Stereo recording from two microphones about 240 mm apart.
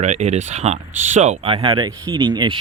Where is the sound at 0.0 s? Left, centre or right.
Right.